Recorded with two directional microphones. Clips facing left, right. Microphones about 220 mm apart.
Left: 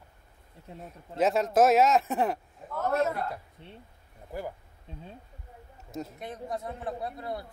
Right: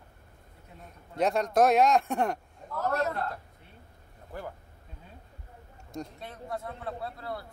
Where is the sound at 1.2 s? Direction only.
5° left (ahead or behind).